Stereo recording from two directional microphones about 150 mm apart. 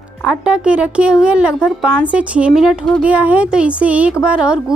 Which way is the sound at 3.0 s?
10° right (ahead or behind).